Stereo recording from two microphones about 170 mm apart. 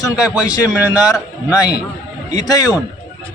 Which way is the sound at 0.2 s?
5° right (ahead or behind).